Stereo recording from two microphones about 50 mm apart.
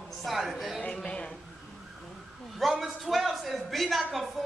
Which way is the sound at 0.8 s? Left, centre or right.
Left.